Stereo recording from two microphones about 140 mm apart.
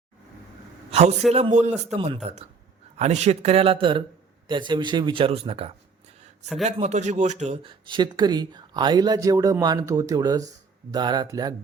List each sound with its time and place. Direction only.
0.9 s a sound: 50° right (ahead or behind)
1.3 s a man's voice: 55° right (ahead or behind)
7.6 s speech: 35° right (ahead or behind)